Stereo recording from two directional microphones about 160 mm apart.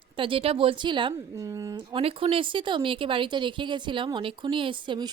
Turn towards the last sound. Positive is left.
turn(degrees=-30)  # may be behind; listen again after turning